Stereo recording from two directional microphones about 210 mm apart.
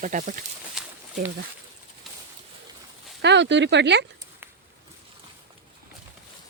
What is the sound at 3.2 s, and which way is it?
Speech, 55° right (ahead or behind).